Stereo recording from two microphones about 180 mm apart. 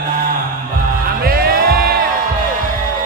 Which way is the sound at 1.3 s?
55° right (ahead or behind).